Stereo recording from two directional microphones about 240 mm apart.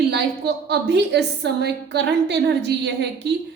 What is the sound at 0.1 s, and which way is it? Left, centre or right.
A woman's voice, right.